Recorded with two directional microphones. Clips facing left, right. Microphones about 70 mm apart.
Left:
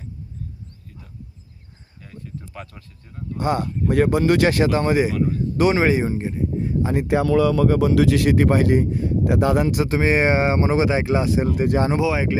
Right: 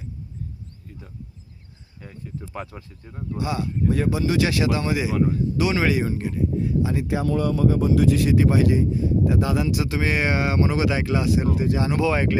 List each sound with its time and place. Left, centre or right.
2.0 s speech: centre
3.3 s speech: left
3.8 s speech: left
6.9 s speech: left
11.5 s speech: left
12.0 s speech: centre